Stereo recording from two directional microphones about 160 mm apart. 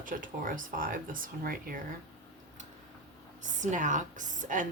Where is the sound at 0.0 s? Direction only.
55° right (ahead or behind).